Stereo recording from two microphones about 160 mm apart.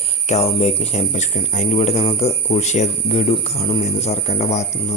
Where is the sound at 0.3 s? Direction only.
40° left (ahead or behind).